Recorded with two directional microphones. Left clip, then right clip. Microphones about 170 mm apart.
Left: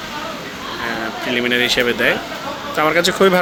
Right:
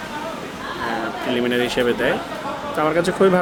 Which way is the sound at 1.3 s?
15° right (ahead or behind).